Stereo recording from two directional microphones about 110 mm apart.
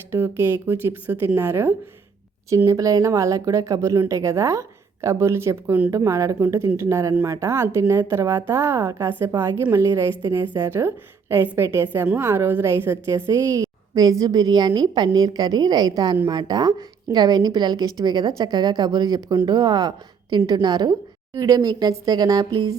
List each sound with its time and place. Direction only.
0.1 s a woman's voice: 25° right (ahead or behind)
2.6 s a woman's voice: 30° right (ahead or behind)